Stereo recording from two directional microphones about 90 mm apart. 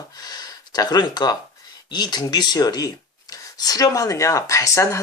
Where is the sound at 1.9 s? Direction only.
50° left (ahead or behind).